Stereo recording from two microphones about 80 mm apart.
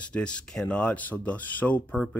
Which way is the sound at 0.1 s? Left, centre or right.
Centre.